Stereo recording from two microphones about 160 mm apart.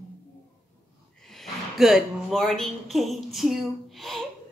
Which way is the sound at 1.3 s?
Centre (ahead or behind).